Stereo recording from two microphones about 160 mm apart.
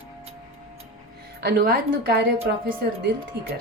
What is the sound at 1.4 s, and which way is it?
Speech, 80° right.